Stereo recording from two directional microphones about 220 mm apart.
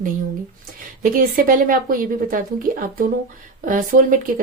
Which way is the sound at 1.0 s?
40° right (ahead or behind).